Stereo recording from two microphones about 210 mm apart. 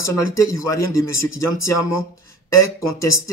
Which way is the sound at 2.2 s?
15° left (ahead or behind).